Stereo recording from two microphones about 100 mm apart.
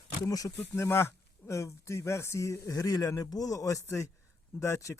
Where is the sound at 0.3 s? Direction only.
35° left (ahead or behind).